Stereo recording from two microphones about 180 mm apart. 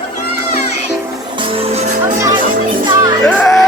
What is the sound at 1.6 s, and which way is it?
Music, 35° right (ahead or behind).